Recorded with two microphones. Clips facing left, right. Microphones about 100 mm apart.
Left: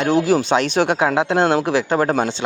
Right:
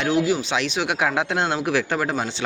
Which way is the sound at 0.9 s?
30° left (ahead or behind).